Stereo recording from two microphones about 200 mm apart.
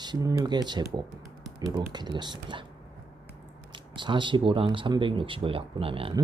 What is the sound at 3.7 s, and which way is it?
Speech, 25° right (ahead or behind).